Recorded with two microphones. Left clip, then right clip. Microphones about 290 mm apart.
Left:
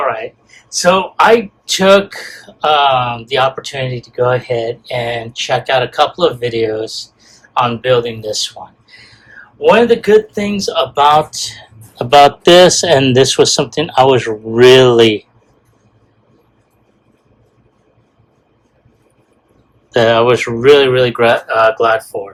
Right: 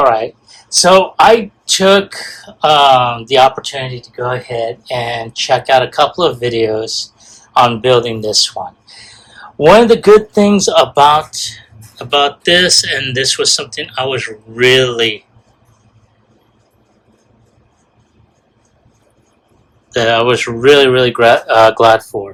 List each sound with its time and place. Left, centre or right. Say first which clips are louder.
0.1 s speech: right 6 dB; centre
9.6 s speech: right 3 dB; right
11.0 s speech: left 2 dB; centre
11.3 s speech: even; centre
19.9 s speech: left 2 dB; centre